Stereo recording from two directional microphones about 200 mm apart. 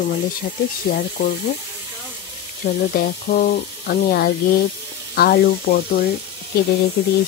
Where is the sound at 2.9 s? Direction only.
50° left (ahead or behind).